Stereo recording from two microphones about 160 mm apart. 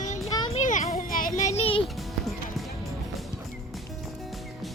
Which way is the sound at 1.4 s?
45° left (ahead or behind).